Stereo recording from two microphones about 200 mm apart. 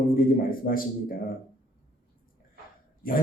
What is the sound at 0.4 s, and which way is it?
Speech, 45° left (ahead or behind).